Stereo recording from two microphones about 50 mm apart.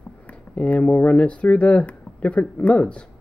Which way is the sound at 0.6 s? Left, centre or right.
Left.